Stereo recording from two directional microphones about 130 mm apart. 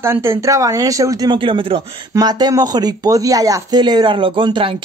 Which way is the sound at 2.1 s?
30° right (ahead or behind).